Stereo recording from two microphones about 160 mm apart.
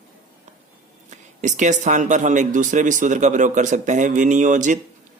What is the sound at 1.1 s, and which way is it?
Speech, 50° right (ahead or behind).